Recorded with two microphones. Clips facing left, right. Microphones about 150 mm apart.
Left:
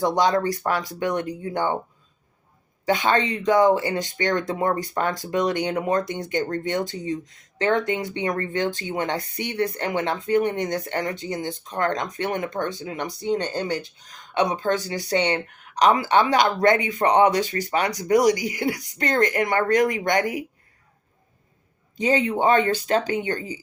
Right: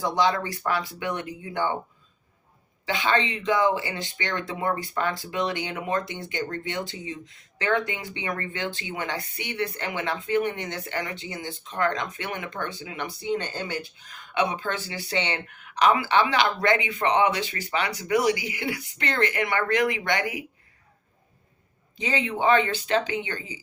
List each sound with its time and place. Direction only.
0.2 s speech: 40° left (ahead or behind)
2.8 s speech: 45° left (ahead or behind)
21.9 s speech: 45° left (ahead or behind)